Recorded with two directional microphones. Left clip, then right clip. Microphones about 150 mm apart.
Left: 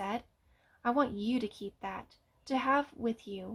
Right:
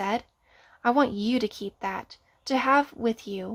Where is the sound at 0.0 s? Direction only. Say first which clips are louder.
Right 9 dB; 40° right (ahead or behind).